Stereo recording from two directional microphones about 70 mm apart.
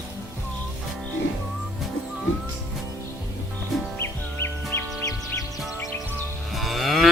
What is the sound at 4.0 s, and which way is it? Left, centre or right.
Music, left.